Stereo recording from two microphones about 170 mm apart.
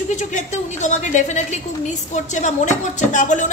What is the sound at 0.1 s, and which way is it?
A woman's voice, 45° left (ahead or behind).